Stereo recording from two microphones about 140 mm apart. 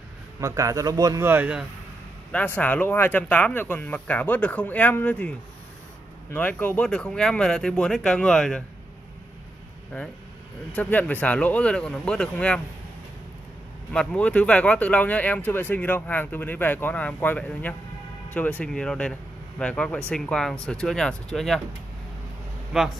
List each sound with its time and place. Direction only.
0.4 s speech: 25° right (ahead or behind)
1.3 s speech: 15° right (ahead or behind)
2.3 s speech: 10° left (ahead or behind)
6.3 s speech: 10° left (ahead or behind)
10.7 s speech: 10° left (ahead or behind)
13.9 s speech: 10° left (ahead or behind)
22.7 s speech: centre (ahead or behind)